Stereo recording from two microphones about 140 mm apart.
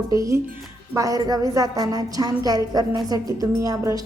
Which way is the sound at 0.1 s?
25° right (ahead or behind).